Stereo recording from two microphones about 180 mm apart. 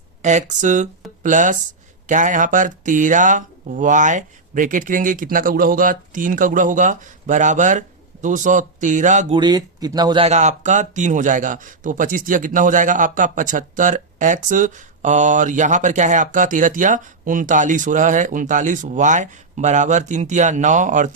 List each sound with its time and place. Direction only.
0.2 s speech: 40° right (ahead or behind)
9.3 s speech: 25° right (ahead or behind)
10.2 s speech: 40° right (ahead or behind)